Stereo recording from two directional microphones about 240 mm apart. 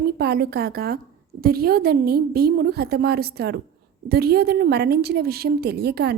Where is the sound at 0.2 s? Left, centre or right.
Right.